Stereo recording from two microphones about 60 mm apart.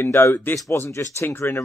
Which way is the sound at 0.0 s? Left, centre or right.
Left.